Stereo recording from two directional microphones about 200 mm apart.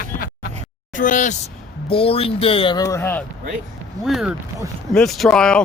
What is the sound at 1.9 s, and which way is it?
Speech, 30° left (ahead or behind).